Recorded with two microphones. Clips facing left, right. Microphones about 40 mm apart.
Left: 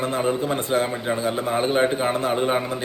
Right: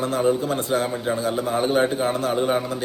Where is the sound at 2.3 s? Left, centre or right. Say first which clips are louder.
Even; centre.